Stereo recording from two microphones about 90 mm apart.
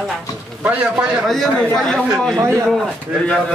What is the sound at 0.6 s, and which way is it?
Speech, 15° right (ahead or behind).